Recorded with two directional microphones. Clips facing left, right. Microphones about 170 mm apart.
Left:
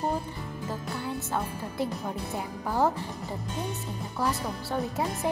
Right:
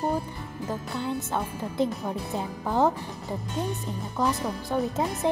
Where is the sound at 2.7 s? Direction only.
20° right (ahead or behind).